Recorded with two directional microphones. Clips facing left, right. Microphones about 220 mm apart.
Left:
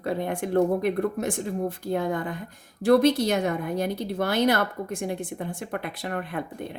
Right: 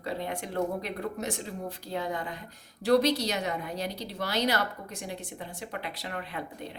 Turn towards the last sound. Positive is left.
turn(degrees=50)  # may be behind; listen again after turning